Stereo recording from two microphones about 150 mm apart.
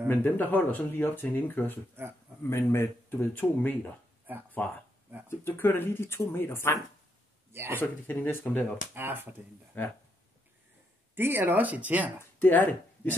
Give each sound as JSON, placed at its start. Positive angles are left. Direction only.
{"t": 0.1, "sound": "speech", "side_deg": 10}
{"t": 4.3, "sound": "speech", "side_deg": -10}
{"t": 5.3, "sound": "speech", "side_deg": 15}
{"t": 7.5, "sound": "speech", "side_deg": -15}
{"t": 7.8, "sound": "speech", "side_deg": 15}
{"t": 8.9, "sound": "speech", "side_deg": -15}
{"t": 11.1, "sound": "speech", "side_deg": -15}
{"t": 12.2, "sound": "speech", "side_deg": 15}